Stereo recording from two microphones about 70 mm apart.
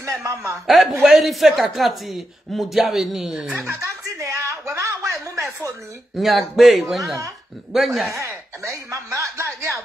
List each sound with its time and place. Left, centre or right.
0.0 s a man's voice: right
0.7 s speech: centre
3.8 s chuckle: right
4.7 s a sound: right
6.1 s speech: centre
8.1 s speech: right